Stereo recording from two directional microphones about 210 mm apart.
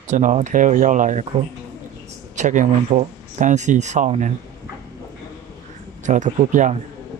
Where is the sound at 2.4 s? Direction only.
35° right (ahead or behind).